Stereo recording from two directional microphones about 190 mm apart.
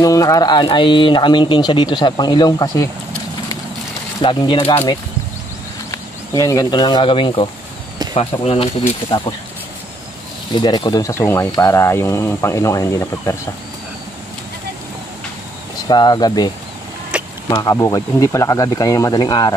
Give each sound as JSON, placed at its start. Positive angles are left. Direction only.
{"t": 0.0, "sound": "speech", "side_deg": 20}
{"t": 4.2, "sound": "speech", "side_deg": 25}
{"t": 9.0, "sound": "speech", "side_deg": 10}
{"t": 10.5, "sound": "speech", "side_deg": 25}
{"t": 15.9, "sound": "speech", "side_deg": 25}
{"t": 17.1, "sound": "a sound", "side_deg": -5}
{"t": 17.5, "sound": "speech", "side_deg": 20}